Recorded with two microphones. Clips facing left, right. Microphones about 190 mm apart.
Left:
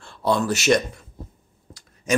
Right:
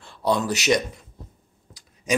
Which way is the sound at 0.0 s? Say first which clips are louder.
Left 1 dB; 15° right (ahead or behind).